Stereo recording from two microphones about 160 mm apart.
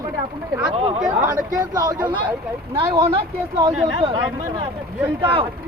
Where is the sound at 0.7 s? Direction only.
35° right (ahead or behind).